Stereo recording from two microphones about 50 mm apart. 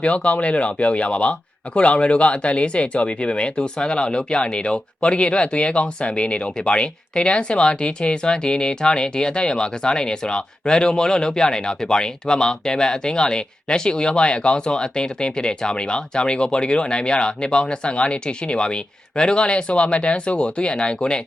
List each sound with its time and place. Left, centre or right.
0.0 s speech: left